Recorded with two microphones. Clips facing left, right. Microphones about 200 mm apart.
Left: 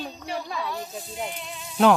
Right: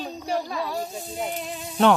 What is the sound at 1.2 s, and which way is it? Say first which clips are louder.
Sizzle: right 5 dB; 40° right (ahead or behind).